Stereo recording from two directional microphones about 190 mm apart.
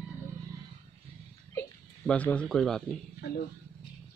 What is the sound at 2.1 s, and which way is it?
Speech, 5° left (ahead or behind).